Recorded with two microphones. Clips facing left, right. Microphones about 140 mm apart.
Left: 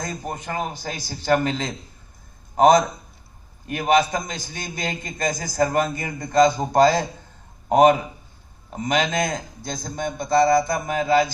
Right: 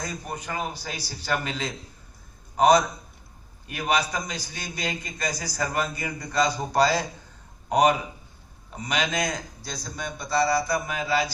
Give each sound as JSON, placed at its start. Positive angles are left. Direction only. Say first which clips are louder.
{"t": 0.1, "sound": "a man's voice", "louder": "left 4 dB", "side_deg": 45}
{"t": 5.5, "sound": "a man's voice", "louder": "left 8 dB", "side_deg": 25}
{"t": 5.7, "sound": "a man's voice", "louder": "left 5 dB", "side_deg": 45}
{"t": 8.8, "sound": "a man's voice", "louder": "left 5 dB", "side_deg": 45}